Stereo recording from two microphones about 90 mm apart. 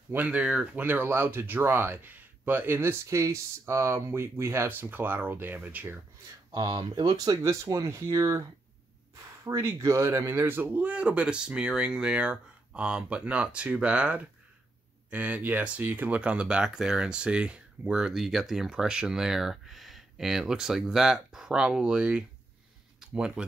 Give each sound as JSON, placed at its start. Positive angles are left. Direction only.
{"t": 0.1, "sound": "speech", "side_deg": -15}
{"t": 6.5, "sound": "speech", "side_deg": -55}
{"t": 7.4, "sound": "speech", "side_deg": -35}
{"t": 9.5, "sound": "speech", "side_deg": -40}
{"t": 22.9, "sound": "a sound", "side_deg": -10}